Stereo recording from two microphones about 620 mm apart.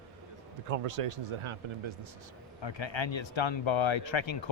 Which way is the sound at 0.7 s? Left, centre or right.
Right.